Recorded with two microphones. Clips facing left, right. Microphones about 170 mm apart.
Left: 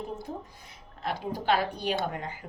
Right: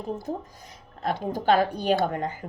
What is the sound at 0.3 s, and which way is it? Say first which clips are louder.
A woman's voice: right 6 dB; 40° right (ahead or behind).